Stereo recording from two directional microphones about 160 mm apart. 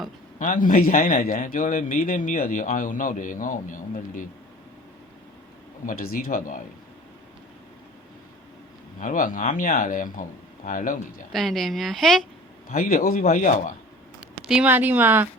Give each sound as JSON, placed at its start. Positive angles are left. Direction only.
{"t": 0.3, "sound": "a man's voice", "side_deg": 55}
{"t": 5.8, "sound": "a man's voice", "side_deg": 60}
{"t": 9.0, "sound": "a man's voice", "side_deg": 55}
{"t": 11.3, "sound": "a woman's voice", "side_deg": 0}
{"t": 12.6, "sound": "a man's voice", "side_deg": 60}
{"t": 13.2, "sound": "a man's voice", "side_deg": 55}
{"t": 14.2, "sound": "speech", "side_deg": -5}